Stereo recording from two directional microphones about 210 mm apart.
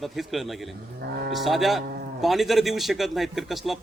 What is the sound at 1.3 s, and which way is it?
A man's voice, centre (ahead or behind).